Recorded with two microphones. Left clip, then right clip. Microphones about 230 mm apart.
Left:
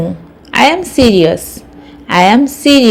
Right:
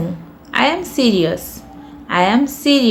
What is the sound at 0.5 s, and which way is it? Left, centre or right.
A woman's voice, left.